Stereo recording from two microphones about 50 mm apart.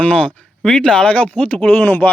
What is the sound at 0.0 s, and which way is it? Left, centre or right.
Speech, left.